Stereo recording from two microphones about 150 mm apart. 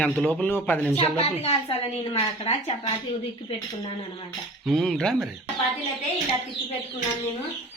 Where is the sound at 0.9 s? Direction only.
45° left (ahead or behind).